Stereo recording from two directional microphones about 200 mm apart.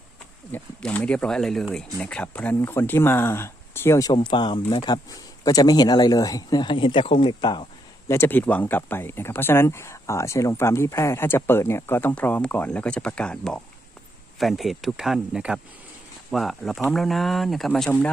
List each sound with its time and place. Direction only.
0.5 s speech: 5° left (ahead or behind)